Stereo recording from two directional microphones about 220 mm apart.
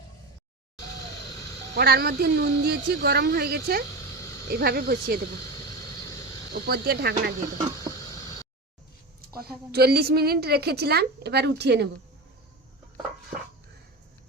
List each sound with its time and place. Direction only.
0.8 s vehicle: 20° left (ahead or behind)
1.7 s a woman's voice: 45° right (ahead or behind)
3.8 s a sound: 15° left (ahead or behind)
4.4 s a woman's voice: 45° right (ahead or behind)
5.4 s vehicle: 15° left (ahead or behind)
6.5 s a woman's voice: 45° right (ahead or behind)
7.9 s a sound: 15° left (ahead or behind)
9.3 s a woman's voice: 45° right (ahead or behind)